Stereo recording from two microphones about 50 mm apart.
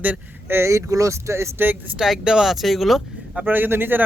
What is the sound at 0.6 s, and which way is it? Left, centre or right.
Speech, right.